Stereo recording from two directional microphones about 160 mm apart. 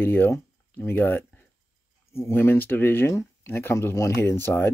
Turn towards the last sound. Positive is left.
turn(degrees=15)  # may be behind; listen again after turning